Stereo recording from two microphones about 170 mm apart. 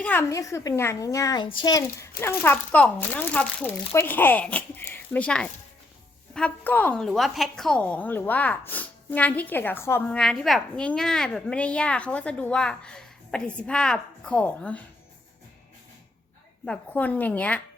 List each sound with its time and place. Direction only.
0.0 s a woman's voice: 10° left (ahead or behind)
16.6 s a woman's voice: 10° left (ahead or behind)